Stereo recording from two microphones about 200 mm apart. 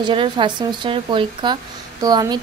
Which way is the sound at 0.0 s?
25° right (ahead or behind).